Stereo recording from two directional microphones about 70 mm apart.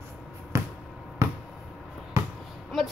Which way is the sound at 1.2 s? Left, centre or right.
Right.